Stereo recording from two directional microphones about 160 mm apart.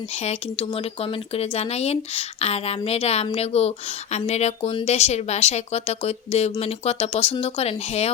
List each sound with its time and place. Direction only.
0.2 s speech: 40° left (ahead or behind)